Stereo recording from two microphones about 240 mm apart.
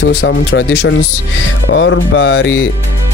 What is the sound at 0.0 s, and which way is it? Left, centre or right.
Speech, left.